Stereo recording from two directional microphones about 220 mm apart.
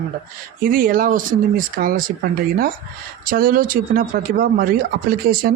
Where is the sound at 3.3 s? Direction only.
40° right (ahead or behind).